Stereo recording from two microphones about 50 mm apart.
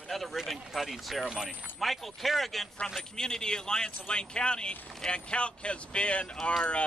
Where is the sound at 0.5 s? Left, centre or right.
Centre.